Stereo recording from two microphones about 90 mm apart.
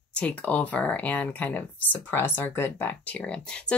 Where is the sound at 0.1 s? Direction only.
15° left (ahead or behind).